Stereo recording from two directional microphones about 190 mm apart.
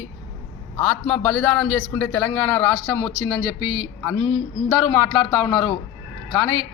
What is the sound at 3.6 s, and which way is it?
Speech, 25° right (ahead or behind).